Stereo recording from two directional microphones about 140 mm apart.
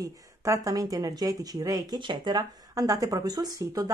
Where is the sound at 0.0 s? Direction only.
20° right (ahead or behind).